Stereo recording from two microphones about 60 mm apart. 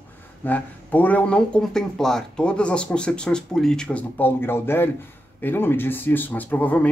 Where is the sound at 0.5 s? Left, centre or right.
Left.